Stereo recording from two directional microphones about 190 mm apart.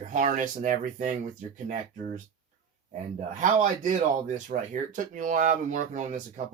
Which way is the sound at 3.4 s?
40° right (ahead or behind).